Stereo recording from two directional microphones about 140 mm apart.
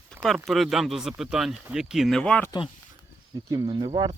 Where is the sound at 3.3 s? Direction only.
30° right (ahead or behind).